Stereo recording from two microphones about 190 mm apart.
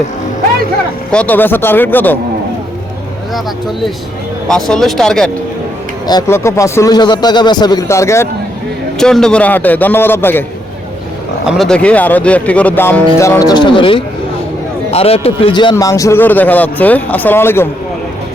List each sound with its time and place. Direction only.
1.1 s speech: 10° left (ahead or behind)
4.4 s speech: 5° left (ahead or behind)
6.1 s a man's voice: 20° left (ahead or behind)
9.0 s speech: 5° left (ahead or behind)
11.4 s speech: centre (ahead or behind)